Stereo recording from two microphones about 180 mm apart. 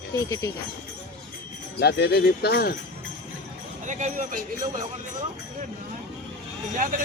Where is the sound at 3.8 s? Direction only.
45° right (ahead or behind).